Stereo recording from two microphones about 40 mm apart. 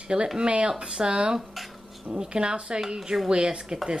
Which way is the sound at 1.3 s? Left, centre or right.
Centre.